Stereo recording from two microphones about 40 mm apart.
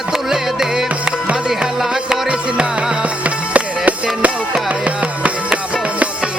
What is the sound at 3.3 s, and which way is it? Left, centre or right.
Music, right.